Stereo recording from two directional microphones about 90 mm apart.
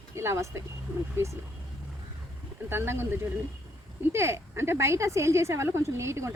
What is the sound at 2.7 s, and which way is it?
Speech, 25° right (ahead or behind).